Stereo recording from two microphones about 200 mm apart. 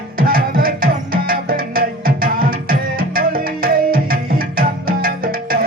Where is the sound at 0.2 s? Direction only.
45° right (ahead or behind).